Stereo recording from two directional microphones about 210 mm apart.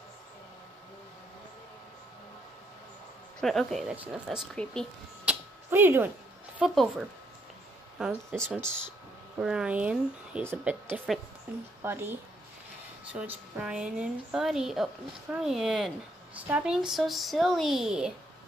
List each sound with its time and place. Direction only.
3.3 s speech: centre (ahead or behind)
5.3 s a sound: 10° right (ahead or behind)
6.6 s a woman's voice: centre (ahead or behind)